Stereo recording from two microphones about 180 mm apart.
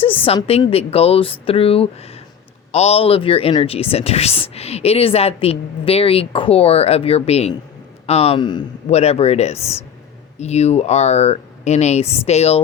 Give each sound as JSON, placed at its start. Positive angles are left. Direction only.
{"t": 0.0, "sound": "speech", "side_deg": 30}
{"t": 8.9, "sound": "speech", "side_deg": 35}